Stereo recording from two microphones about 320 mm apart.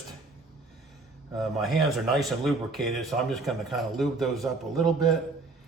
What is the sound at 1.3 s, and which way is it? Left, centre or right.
Speech, centre.